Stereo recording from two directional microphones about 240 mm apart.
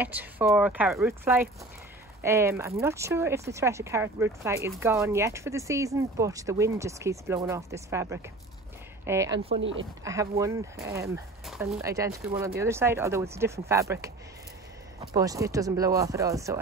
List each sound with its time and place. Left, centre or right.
0.0 s speech: centre
9.6 s speech: right
10.0 s speech: centre